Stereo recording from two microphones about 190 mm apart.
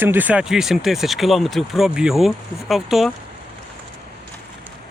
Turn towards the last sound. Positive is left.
turn(degrees=0)  # may be behind; listen again after turning